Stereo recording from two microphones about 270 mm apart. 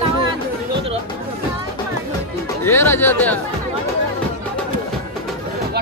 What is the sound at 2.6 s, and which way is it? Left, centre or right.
Speech, centre.